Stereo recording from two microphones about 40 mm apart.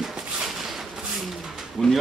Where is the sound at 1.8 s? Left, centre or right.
Centre.